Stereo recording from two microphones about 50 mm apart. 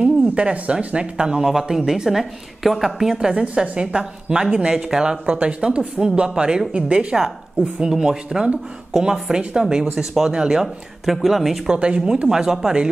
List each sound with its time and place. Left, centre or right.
0.0 s speech: right
5.2 s a woman's voice: right; by 11.7 s centre
11.7 s speech: centre